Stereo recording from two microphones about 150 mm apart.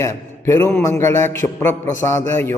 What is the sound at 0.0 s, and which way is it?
A man's voice, 20° left (ahead or behind).